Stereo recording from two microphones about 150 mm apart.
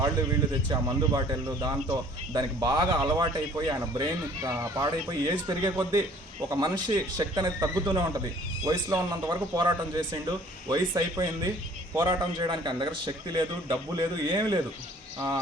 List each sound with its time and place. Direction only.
0.7 s speech: 25° right (ahead or behind)